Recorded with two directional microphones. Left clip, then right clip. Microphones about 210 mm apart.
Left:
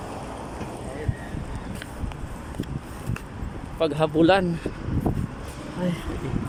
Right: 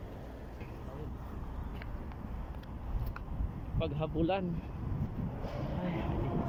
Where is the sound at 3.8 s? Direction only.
45° left (ahead or behind).